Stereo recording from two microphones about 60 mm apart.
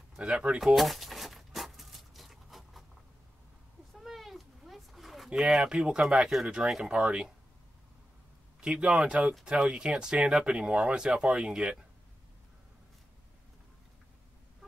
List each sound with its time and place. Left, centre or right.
0.1 s speech: centre
0.6 s a sound: centre
3.9 s cat: centre
5.3 s speech: centre
8.5 s speech: centre